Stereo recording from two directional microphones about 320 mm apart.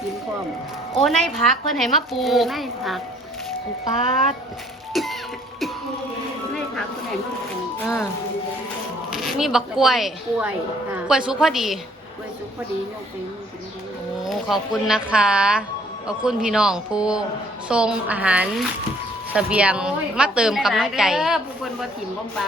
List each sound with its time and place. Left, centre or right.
0.9 s a woman's voice: centre
4.9 s a woman's voice: centre
9.0 s a woman's voice: centre
14.3 s a woman's voice: centre